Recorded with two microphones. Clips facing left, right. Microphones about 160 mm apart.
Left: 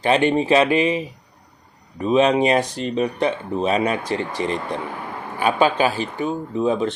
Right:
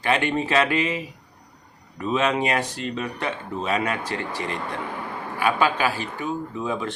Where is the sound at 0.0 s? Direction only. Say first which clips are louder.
Left 5 dB; 20° left (ahead or behind).